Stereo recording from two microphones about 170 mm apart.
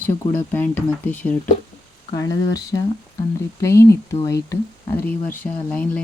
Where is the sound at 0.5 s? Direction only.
10° left (ahead or behind).